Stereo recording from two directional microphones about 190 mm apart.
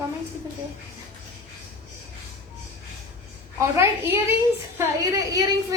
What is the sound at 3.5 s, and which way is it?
A woman's voice, 15° right (ahead or behind).